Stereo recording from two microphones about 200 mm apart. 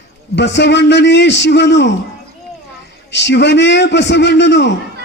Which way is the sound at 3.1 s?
60° left (ahead or behind).